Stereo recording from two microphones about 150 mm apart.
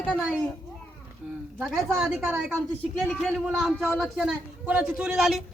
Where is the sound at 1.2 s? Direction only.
5° right (ahead or behind).